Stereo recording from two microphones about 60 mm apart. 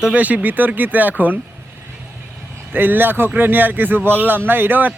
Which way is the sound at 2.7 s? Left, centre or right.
Right.